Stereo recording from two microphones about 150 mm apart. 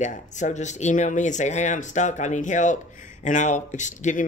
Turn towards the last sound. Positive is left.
turn(degrees=55)  # may be behind; listen again after turning